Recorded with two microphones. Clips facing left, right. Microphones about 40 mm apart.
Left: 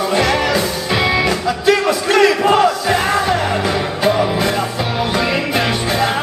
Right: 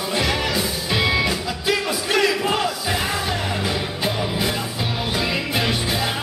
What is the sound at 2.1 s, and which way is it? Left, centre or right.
Crowd, left.